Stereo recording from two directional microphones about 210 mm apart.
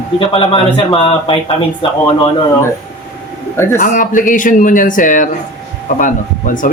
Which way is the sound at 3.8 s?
40° left (ahead or behind).